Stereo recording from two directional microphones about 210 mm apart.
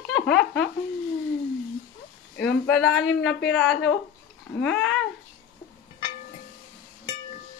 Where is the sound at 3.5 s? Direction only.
60° left (ahead or behind).